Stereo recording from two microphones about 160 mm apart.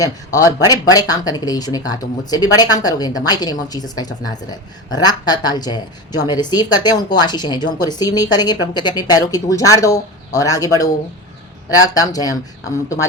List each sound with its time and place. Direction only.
0.0 s speech: 20° left (ahead or behind)